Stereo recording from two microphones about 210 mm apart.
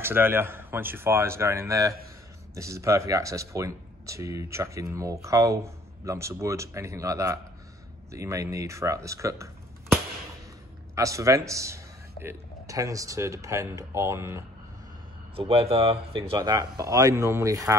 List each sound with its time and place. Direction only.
0.0 s speech: 10° right (ahead or behind)
11.0 s speech: 15° right (ahead or behind)
15.3 s speech: 30° right (ahead or behind)